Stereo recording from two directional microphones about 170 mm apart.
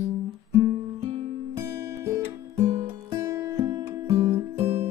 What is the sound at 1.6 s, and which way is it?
Music, 15° right (ahead or behind).